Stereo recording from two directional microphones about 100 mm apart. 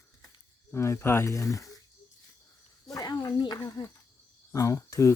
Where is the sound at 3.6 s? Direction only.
35° left (ahead or behind).